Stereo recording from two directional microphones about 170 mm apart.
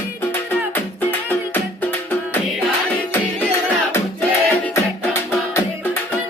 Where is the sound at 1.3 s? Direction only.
10° left (ahead or behind).